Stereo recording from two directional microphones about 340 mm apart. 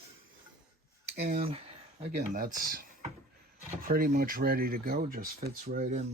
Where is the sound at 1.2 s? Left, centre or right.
Centre.